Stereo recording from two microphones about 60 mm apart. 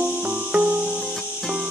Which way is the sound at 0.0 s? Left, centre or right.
Right.